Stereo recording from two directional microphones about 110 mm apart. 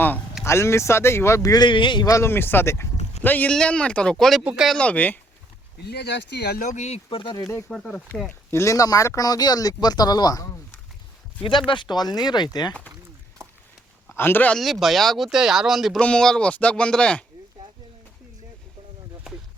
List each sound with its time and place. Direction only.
0.4 s speech: 25° left (ahead or behind)
1.6 s a man's voice: 45° left (ahead or behind)
2.0 s speech: 25° left (ahead or behind); by 4.8 s 5° right (ahead or behind)
4.8 s speech: 15° left (ahead or behind)
6.7 s speech: 80° left
7.2 s a man's voice: 50° left (ahead or behind)
7.7 s speech: centre (ahead or behind)
8.4 s speech: 25° left (ahead or behind)
11.4 s speech: 50° left (ahead or behind)
14.1 s speech: 20° left (ahead or behind)
14.5 s speech: centre (ahead or behind)
16.0 s speech: 10° left (ahead or behind)